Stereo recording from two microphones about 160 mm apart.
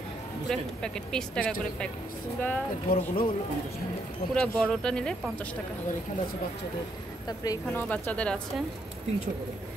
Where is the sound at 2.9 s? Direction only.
65° left (ahead or behind).